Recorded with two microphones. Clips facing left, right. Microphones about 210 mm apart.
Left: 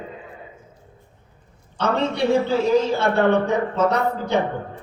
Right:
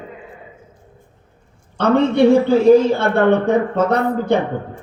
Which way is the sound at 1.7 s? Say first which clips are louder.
Right 8 dB; 55° right (ahead or behind).